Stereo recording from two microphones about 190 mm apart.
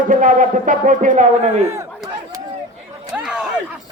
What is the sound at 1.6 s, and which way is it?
Speech, 15° right (ahead or behind).